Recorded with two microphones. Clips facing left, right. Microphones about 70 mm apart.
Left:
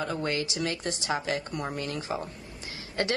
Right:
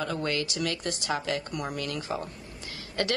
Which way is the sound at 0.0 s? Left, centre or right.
Left.